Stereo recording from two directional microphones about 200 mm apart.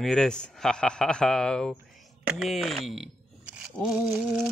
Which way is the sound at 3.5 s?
5° right (ahead or behind).